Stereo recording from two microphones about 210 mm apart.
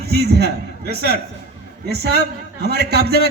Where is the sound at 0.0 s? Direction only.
50° right (ahead or behind).